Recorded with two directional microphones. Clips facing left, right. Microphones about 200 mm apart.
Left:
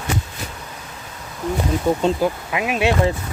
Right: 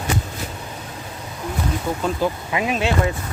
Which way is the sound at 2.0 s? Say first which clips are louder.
Left 3 dB; 25° left (ahead or behind).